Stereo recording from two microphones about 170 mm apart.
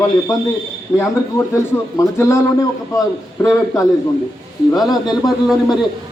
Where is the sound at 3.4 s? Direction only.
20° left (ahead or behind).